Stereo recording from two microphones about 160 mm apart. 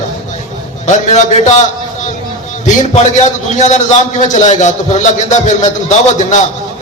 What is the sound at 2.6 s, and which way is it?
A man's voice, 45° left (ahead or behind).